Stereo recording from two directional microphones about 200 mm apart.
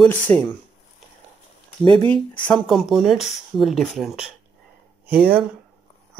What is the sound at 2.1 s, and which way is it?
Speech, 5° left (ahead or behind).